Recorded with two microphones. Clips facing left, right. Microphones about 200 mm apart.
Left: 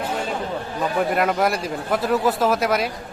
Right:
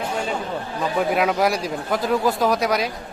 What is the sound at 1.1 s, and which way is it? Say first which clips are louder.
Speech: right 1 dB; centre (ahead or behind).